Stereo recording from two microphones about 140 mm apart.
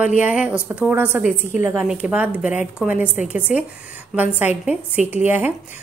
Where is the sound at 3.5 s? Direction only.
65° left (ahead or behind).